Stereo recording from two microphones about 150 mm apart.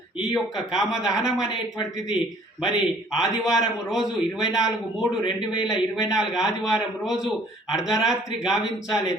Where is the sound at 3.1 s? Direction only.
5° right (ahead or behind).